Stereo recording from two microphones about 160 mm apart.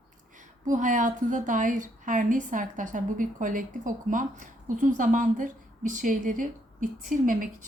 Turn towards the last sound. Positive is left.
turn(degrees=-55)  # may be behind; listen again after turning